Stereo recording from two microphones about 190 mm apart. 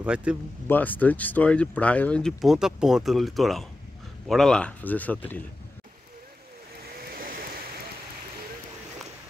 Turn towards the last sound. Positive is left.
turn(degrees=-50)  # may be behind; listen again after turning